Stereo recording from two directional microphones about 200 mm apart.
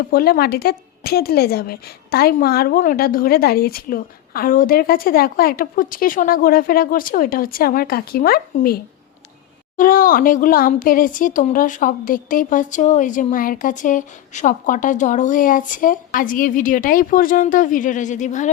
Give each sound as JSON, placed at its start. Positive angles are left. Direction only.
{"t": 0.1, "sound": "a woman's voice", "side_deg": 50}